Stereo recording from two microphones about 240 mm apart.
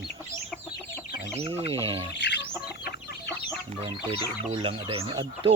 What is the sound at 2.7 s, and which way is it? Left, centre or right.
Chicken, left.